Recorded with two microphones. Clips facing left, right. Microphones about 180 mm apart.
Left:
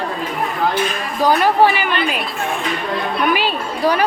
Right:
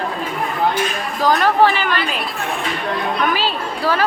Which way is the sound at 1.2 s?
15° left (ahead or behind).